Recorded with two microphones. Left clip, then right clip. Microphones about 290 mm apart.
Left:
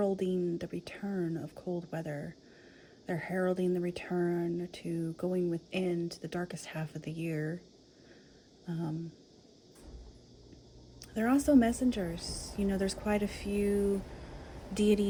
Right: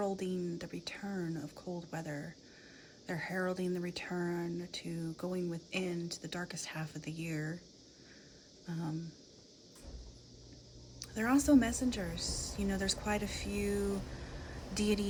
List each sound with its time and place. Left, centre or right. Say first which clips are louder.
0.0 s speech: left 5 dB; centre
8.6 s speech: left 4 dB; centre
11.0 s speech: left 2 dB; centre